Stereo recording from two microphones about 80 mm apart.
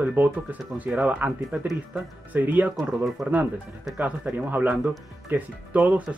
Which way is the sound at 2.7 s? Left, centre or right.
Centre.